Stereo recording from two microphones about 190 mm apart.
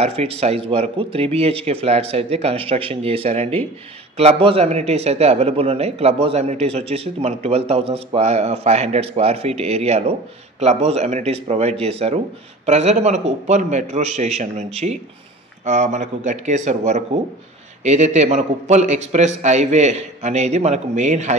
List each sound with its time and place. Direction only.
0.0 s a man's voice: 30° right (ahead or behind)